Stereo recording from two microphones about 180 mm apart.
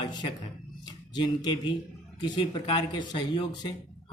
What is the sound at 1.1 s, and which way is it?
A man's voice, 25° left (ahead or behind).